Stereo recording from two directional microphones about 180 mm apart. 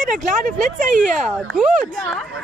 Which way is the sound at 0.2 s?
45° right (ahead or behind).